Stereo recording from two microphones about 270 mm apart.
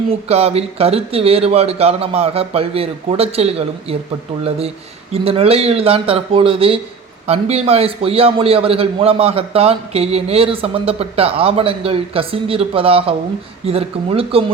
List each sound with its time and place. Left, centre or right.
0.1 s a man's voice: right